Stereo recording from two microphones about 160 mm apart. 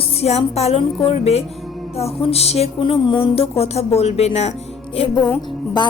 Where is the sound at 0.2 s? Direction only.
40° left (ahead or behind).